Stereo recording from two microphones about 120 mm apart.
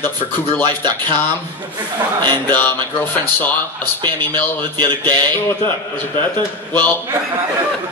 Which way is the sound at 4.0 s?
40° right (ahead or behind).